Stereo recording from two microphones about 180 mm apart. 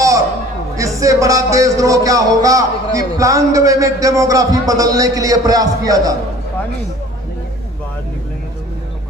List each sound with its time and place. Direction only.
0.8 s a man's voice: 20° right (ahead or behind)